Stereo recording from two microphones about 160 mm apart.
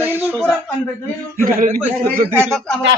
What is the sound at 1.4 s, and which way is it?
Speech, 65° right (ahead or behind).